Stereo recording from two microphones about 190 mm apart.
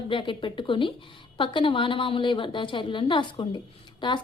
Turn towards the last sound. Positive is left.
turn(degrees=25)  # may be behind; listen again after turning